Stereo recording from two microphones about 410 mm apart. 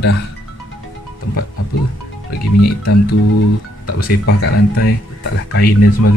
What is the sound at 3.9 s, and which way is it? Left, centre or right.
Speech, left.